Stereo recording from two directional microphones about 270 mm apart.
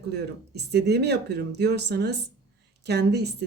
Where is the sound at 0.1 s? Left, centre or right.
Right.